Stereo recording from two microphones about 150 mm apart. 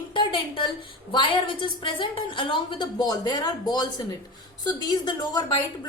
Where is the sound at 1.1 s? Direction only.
35° left (ahead or behind).